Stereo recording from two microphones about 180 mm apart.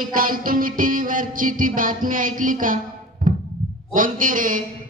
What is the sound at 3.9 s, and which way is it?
Speech, 50° right (ahead or behind).